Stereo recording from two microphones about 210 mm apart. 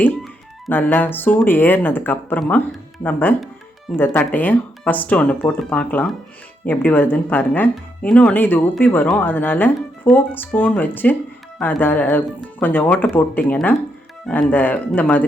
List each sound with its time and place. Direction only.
0.7 s speech: 10° left (ahead or behind)